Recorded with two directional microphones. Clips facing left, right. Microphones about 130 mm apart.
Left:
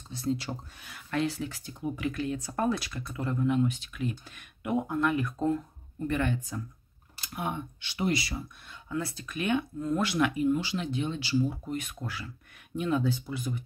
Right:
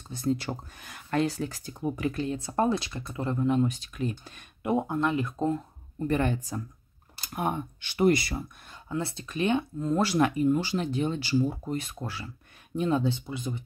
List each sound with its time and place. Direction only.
0.1 s speech: 45° right (ahead or behind); by 5.6 s 25° right (ahead or behind)
6.0 s speech: 35° right (ahead or behind)
8.8 s speech: 25° right (ahead or behind)